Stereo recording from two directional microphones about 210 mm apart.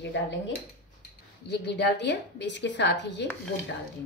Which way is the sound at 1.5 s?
50° left (ahead or behind).